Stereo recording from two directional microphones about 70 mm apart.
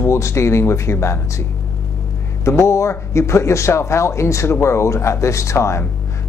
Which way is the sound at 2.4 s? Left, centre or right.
Left.